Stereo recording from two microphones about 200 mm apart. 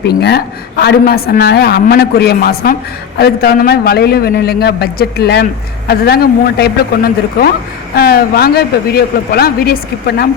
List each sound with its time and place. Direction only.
0.0 s a woman's voice: 55° left (ahead or behind)